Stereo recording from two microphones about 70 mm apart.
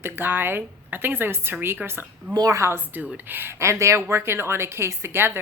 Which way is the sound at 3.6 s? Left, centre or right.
Right.